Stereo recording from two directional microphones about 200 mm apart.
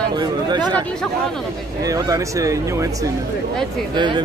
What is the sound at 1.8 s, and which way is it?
Speech, 15° right (ahead or behind).